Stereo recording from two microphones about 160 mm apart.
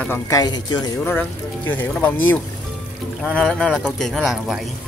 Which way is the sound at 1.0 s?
10° left (ahead or behind).